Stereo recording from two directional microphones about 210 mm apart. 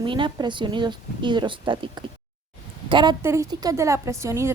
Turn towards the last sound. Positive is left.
turn(degrees=-15)  # may be behind; listen again after turning